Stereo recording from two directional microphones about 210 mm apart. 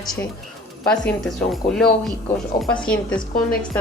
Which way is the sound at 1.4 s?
Centre (ahead or behind).